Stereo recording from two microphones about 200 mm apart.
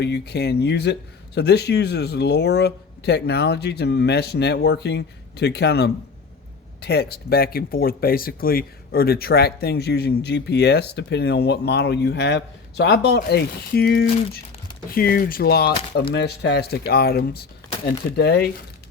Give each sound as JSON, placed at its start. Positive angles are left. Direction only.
{"t": 0.0, "sound": "speech", "side_deg": 55}